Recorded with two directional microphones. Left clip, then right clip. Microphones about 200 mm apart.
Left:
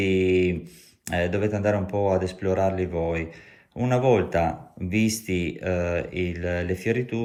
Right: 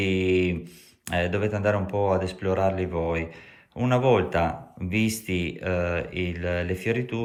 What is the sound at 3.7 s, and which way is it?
Speech, 40° left (ahead or behind).